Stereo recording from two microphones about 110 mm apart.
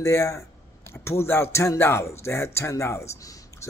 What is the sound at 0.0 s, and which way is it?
Speech, 25° left (ahead or behind).